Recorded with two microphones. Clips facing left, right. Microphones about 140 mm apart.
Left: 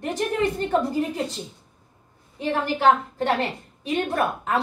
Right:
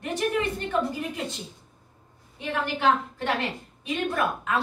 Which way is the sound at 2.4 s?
35° left (ahead or behind).